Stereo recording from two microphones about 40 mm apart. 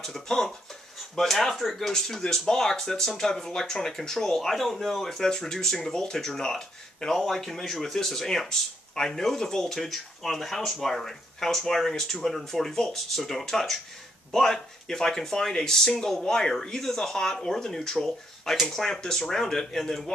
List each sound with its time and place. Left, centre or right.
0.0 s speech: centre